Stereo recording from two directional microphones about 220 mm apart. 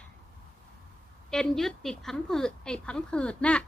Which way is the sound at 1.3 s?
Centre (ahead or behind).